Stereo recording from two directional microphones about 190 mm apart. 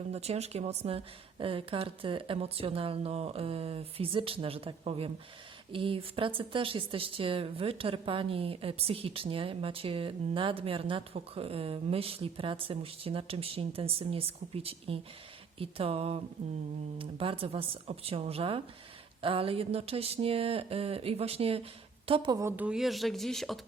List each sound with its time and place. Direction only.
0.1 s speech: 35° right (ahead or behind); by 23.6 s centre (ahead or behind)